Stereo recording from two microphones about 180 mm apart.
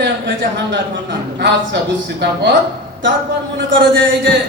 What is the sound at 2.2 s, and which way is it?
Speech, 70° right (ahead or behind).